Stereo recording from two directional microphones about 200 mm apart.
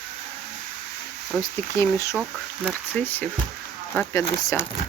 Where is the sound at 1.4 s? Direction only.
15° left (ahead or behind).